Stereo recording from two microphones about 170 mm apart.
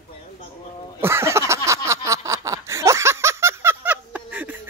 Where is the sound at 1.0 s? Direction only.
15° right (ahead or behind).